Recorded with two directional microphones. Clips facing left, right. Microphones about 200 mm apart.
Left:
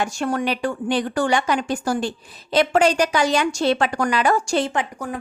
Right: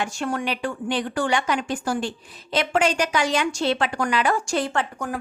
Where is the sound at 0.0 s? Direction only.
40° left (ahead or behind).